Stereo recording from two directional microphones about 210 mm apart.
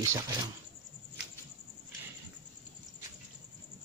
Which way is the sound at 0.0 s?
15° right (ahead or behind).